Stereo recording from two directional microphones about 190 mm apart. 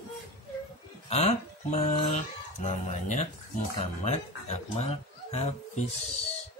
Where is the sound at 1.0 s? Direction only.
35° left (ahead or behind).